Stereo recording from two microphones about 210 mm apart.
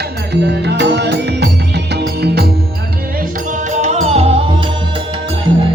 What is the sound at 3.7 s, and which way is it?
Music, 35° right (ahead or behind).